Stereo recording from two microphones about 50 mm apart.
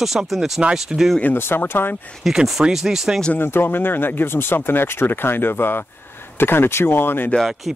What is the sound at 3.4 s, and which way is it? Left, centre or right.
Speech, left.